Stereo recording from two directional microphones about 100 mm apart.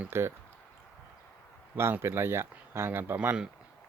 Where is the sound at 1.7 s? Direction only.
25° right (ahead or behind).